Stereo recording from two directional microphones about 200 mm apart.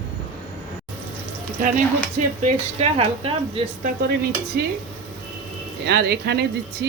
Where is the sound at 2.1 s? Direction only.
35° right (ahead or behind).